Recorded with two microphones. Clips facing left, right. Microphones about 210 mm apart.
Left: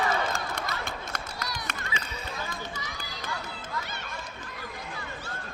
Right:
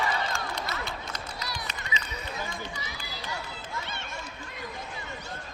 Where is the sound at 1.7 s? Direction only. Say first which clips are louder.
Left 3 dB; 50° left (ahead or behind).